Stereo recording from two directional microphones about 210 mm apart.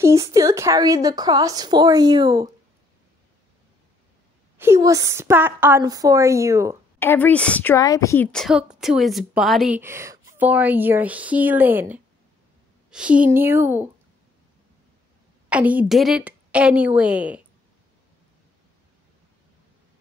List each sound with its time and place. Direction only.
0.0 s a woman's voice: 15° right (ahead or behind)
4.6 s a woman's voice: 15° right (ahead or behind)
7.0 s a woman's voice: 10° left (ahead or behind); by 13.8 s 10° right (ahead or behind)
15.5 s a woman's voice: 5° right (ahead or behind)